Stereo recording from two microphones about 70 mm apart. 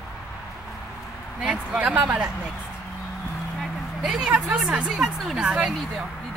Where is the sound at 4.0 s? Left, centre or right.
Centre.